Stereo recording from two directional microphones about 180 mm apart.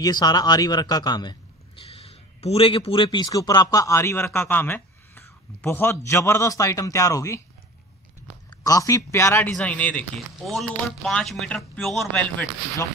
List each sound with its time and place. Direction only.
0.0 s a man's voice: 20° left (ahead or behind)
8.5 s a man's voice: 20° left (ahead or behind)